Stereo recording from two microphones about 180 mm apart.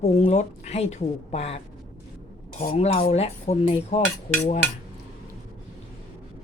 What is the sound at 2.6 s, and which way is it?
Speech, 40° left (ahead or behind).